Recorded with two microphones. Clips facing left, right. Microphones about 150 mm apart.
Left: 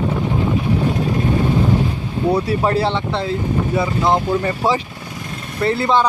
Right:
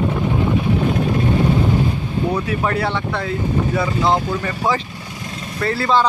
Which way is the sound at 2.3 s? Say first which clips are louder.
Left 3 dB; 30° left (ahead or behind).